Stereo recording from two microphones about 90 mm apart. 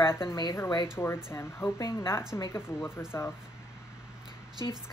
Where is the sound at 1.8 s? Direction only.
35° left (ahead or behind).